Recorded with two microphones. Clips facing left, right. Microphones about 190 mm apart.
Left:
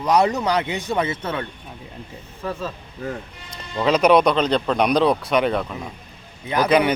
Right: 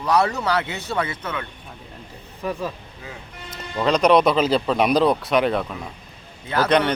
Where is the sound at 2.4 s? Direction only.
15° right (ahead or behind).